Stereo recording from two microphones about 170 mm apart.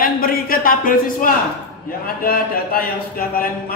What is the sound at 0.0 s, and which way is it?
Speech, 60° left (ahead or behind).